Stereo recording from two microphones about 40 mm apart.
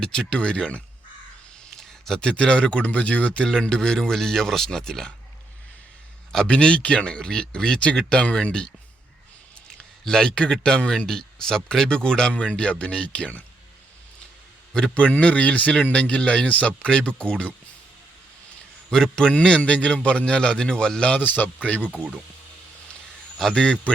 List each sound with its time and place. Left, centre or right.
0.0 s a man's voice: centre
1.8 s a man's voice: centre; by 3.4 s left
3.8 s speech: centre
6.3 s a man's voice: left
10.0 s a man's voice: centre
14.7 s speech: centre
15.2 s a man's voice: left
18.9 s a man's voice: centre
21.2 s speech: left
23.4 s speech: centre